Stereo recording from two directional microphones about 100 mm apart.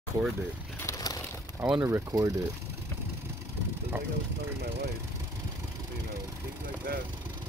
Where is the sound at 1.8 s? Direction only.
25° right (ahead or behind).